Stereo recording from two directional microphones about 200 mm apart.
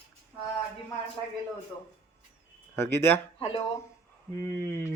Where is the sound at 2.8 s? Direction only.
10° left (ahead or behind).